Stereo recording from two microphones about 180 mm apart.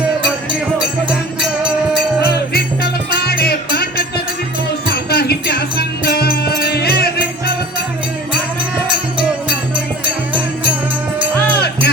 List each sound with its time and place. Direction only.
1.1 s music: 5° right (ahead or behind)
2.2 s music: 60° left (ahead or behind)